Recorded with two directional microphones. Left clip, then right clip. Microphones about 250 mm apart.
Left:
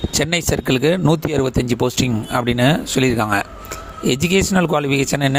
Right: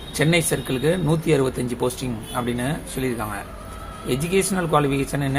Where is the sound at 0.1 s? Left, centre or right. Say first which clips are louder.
Even; left.